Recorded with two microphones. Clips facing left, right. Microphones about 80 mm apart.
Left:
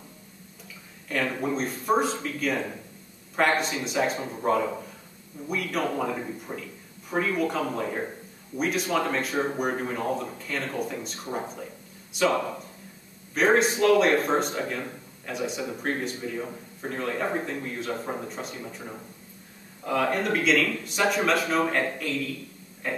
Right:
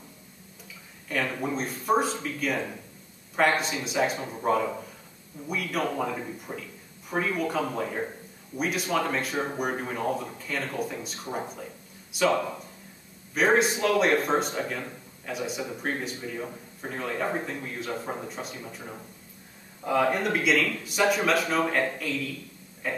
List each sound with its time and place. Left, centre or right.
1.0 s a man's voice: centre
19.8 s a man's voice: centre
22.8 s a sound: centre